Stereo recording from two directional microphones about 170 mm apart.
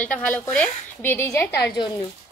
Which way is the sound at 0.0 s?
10° left (ahead or behind).